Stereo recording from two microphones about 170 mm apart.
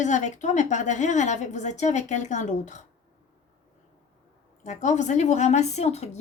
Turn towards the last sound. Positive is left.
turn(degrees=40)  # may be behind; listen again after turning